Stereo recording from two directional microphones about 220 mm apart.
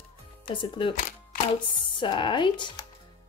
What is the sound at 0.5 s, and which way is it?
Speech, 20° left (ahead or behind).